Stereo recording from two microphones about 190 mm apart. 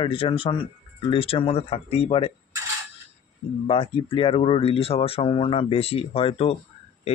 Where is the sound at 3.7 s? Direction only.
30° left (ahead or behind).